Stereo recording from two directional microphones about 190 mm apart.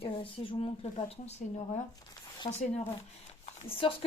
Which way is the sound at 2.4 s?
35° left (ahead or behind).